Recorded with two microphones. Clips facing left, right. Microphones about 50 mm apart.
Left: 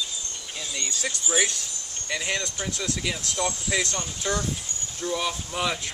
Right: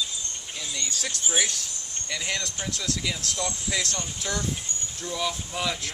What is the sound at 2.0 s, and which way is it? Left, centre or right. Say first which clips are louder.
Speech: left 2 dB; centre.